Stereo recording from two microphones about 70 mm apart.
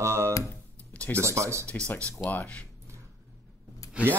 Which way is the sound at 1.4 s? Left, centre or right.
Right.